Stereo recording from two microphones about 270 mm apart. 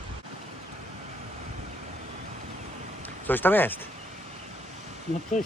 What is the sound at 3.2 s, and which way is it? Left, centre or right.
Speech, centre.